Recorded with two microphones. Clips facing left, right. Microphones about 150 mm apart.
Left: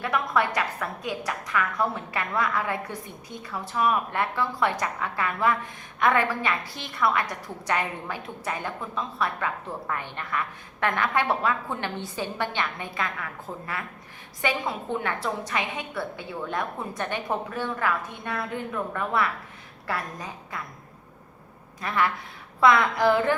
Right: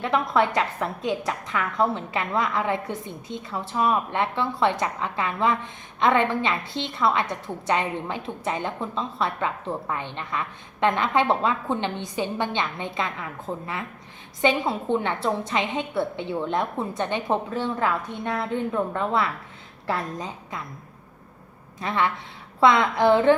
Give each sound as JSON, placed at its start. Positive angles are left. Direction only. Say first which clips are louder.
{"t": 0.0, "sound": "a woman's voice", "louder": "right 3 dB", "side_deg": -25}
{"t": 21.8, "sound": "a woman's voice", "louder": "right 1 dB", "side_deg": -25}